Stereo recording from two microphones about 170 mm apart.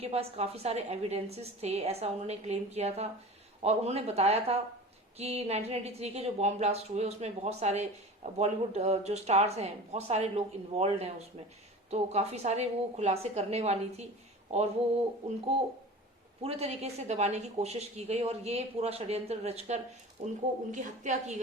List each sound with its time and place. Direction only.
0.0 s a woman's voice: 35° right (ahead or behind)
16.4 s a woman's voice: 35° right (ahead or behind)